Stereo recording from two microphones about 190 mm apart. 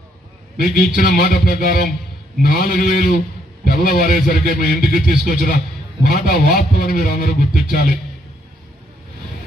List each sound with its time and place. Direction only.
0.6 s a man's voice: 45° left (ahead or behind)